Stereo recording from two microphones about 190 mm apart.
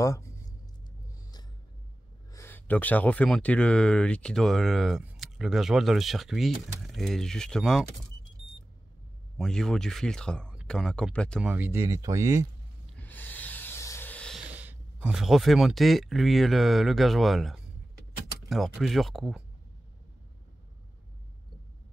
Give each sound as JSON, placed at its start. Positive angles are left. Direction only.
{"t": 0.0, "sound": "a sound", "side_deg": 15}
{"t": 2.3, "sound": "speech", "side_deg": 10}
{"t": 9.4, "sound": "speech", "side_deg": 5}
{"t": 11.4, "sound": "speech", "side_deg": -10}
{"t": 12.9, "sound": "a sound", "side_deg": 10}
{"t": 14.5, "sound": "speech", "side_deg": -10}